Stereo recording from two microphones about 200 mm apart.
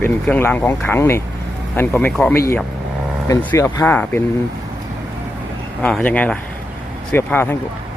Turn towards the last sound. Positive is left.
turn(degrees=10)  # may be behind; listen again after turning